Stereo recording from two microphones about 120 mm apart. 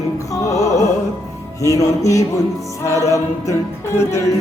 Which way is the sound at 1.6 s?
30° left (ahead or behind).